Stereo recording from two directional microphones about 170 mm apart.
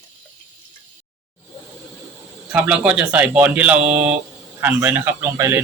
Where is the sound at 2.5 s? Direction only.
10° right (ahead or behind).